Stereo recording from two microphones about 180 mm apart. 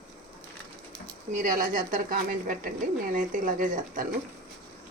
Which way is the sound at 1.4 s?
45° right (ahead or behind).